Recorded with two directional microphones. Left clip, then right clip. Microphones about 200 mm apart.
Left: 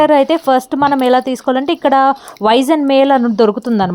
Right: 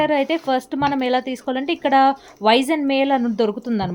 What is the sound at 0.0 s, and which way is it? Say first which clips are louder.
Speech: left 9 dB; 30° left (ahead or behind).